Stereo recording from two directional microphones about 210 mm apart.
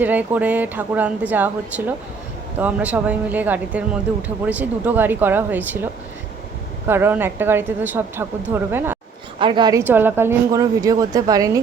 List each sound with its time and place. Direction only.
0.0 s speech: 10° right (ahead or behind)
9.4 s speech: 20° right (ahead or behind)